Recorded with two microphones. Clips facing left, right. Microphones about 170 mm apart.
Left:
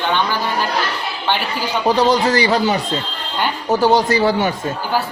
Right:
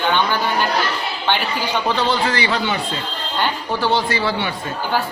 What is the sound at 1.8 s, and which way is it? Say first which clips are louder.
Speech: left 7 dB; 40° left (ahead or behind).